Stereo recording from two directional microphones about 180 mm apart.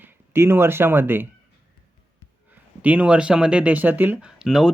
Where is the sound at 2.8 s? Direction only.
10° right (ahead or behind).